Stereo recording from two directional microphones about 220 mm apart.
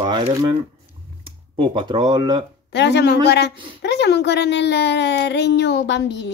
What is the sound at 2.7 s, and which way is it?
Speech, 50° left (ahead or behind).